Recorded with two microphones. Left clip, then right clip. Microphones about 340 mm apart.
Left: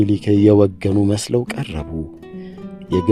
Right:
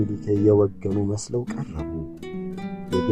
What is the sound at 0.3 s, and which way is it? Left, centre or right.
Speech, left.